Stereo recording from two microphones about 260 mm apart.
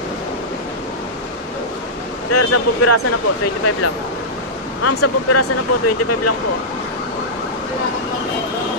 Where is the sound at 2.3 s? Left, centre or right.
Left.